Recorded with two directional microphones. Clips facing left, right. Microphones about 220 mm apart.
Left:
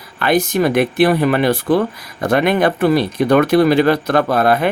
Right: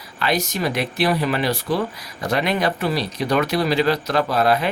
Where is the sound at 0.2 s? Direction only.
55° left (ahead or behind).